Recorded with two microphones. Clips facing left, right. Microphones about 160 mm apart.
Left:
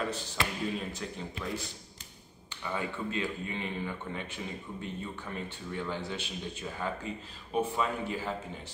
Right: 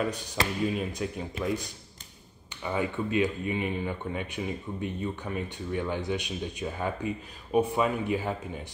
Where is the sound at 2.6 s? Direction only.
15° right (ahead or behind).